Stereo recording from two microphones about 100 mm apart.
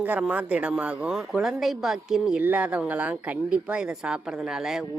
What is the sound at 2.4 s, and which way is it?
A man's voice, 15° right (ahead or behind).